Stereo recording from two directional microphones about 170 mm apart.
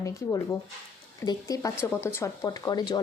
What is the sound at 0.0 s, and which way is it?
Speech, 20° left (ahead or behind).